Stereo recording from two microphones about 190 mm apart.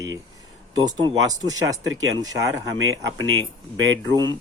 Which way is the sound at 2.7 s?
90° right.